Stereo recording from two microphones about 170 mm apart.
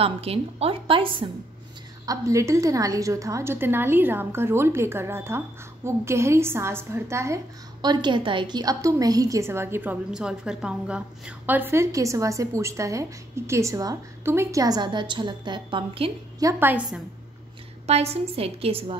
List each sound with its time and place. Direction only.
0.0 s a woman's voice: 35° right (ahead or behind)
2.0 s a woman's voice: 20° right (ahead or behind)
16.3 s a woman's voice: 15° right (ahead or behind)
17.8 s a woman's voice: 40° right (ahead or behind)